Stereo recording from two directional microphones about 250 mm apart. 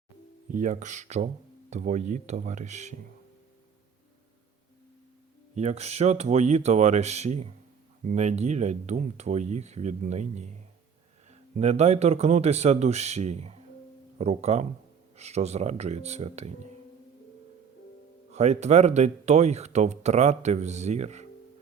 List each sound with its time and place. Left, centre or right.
0.5 s speech: right
5.5 s speech: right
18.3 s speech: right